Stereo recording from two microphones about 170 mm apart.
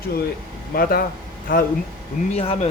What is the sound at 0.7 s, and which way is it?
Speech, 60° left (ahead or behind).